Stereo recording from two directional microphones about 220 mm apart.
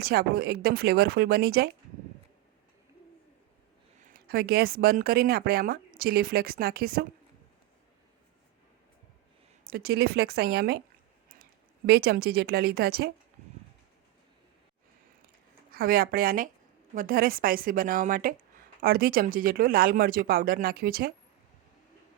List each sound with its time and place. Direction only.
0.0 s speech: 45° right (ahead or behind)
4.0 s speech: 45° right (ahead or behind)
9.6 s speech: 45° right (ahead or behind)
11.9 s speech: 45° right (ahead or behind)
15.7 s a woman's voice: 40° right (ahead or behind)